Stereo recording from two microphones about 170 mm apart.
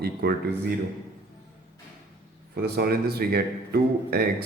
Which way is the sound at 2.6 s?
65° right (ahead or behind).